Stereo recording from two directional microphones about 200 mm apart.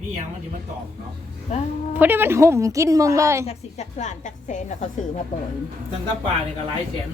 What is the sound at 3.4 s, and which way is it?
A woman's voice, 35° left (ahead or behind).